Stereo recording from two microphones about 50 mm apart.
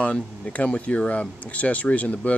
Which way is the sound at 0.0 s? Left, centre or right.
Left.